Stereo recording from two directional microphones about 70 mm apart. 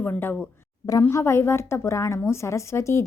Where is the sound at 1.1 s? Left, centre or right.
Left.